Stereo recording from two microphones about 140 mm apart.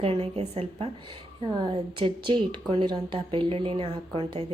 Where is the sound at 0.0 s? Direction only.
45° right (ahead or behind).